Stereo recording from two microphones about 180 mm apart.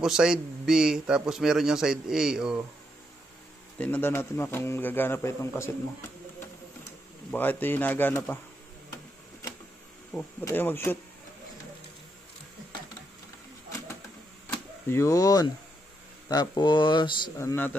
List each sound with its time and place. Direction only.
0.0 s a man's voice: 5° right (ahead or behind)
3.7 s a man's voice: 10° left (ahead or behind)
7.2 s a man's voice: 10° left (ahead or behind)
10.4 s a man's voice: 10° left (ahead or behind)
13.7 s printer: 15° left (ahead or behind)
14.5 s speech: 15° left (ahead or behind)
17.4 s a man's voice: 15° left (ahead or behind)